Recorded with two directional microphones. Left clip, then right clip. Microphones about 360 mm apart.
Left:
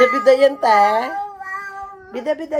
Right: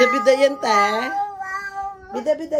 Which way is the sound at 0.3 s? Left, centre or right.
Centre.